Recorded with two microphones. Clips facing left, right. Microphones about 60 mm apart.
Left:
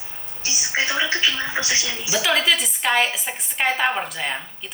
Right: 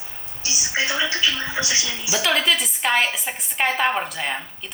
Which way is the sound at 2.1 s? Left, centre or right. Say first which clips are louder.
Left 1 dB; centre.